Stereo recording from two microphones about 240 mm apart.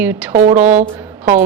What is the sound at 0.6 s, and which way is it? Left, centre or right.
Speech, right.